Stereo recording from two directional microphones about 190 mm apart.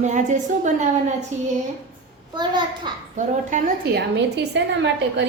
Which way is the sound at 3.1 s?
40° right (ahead or behind).